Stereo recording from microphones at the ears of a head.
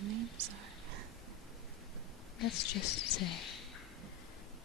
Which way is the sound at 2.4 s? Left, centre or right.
Left.